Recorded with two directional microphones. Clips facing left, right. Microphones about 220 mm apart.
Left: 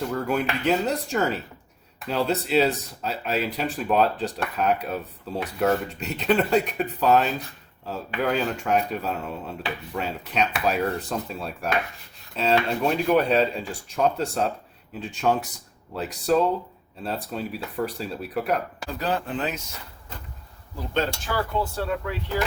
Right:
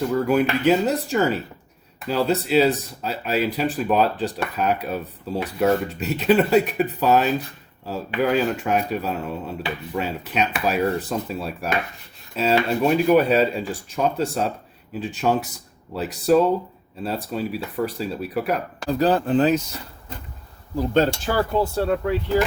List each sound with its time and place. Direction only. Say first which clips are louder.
0.1 s speech: right 6 dB; 5° right (ahead or behind)
18.9 s speech: right 10 dB; 35° right (ahead or behind)
20.7 s speech: right 7 dB; 40° right (ahead or behind)